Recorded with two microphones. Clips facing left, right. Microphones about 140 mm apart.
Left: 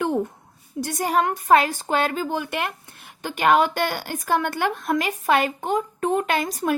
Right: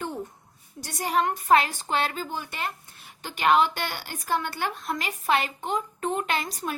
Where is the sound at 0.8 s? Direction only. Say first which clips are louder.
Left 4 dB; 45° left (ahead or behind).